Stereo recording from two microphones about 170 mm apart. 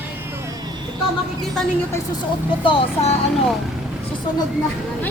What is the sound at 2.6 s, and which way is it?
Speech, 30° left (ahead or behind).